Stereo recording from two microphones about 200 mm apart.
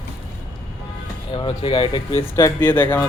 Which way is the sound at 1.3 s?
25° left (ahead or behind).